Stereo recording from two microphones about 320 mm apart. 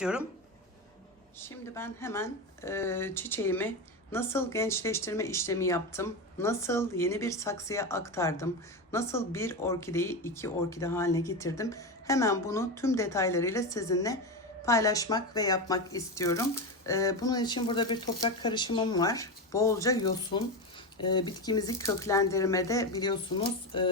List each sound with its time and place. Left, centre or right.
0.0 s speech: centre
1.4 s speech: centre